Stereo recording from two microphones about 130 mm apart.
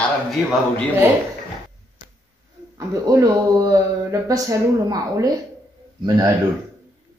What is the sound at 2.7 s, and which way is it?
Speech, 25° right (ahead or behind).